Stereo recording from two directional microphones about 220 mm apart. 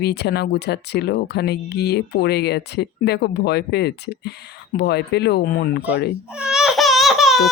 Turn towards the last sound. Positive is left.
turn(degrees=0)  # may be behind; listen again after turning